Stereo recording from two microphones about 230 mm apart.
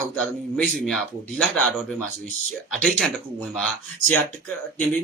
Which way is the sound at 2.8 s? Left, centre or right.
Centre.